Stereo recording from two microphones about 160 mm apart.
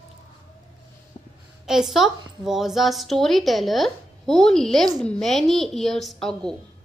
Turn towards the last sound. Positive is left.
turn(degrees=5)  # may be behind; listen again after turning